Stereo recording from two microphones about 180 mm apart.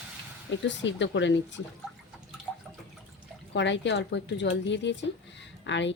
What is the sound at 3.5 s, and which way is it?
Speech, 80° left.